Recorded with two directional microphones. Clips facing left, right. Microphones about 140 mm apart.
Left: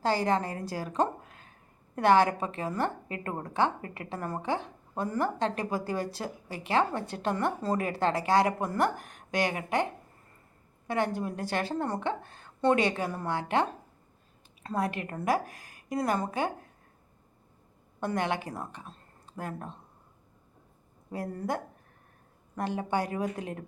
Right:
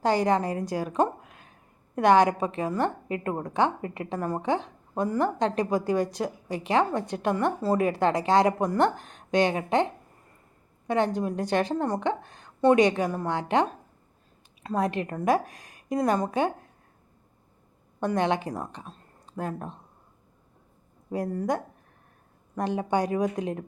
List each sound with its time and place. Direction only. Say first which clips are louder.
0.0 s a woman's voice: right 4 dB; 20° right (ahead or behind)
14.6 s a woman's voice: right 4 dB; 20° right (ahead or behind)
18.0 s speech: right 5 dB; 20° right (ahead or behind)
22.5 s a woman's voice: right 4 dB; 20° right (ahead or behind)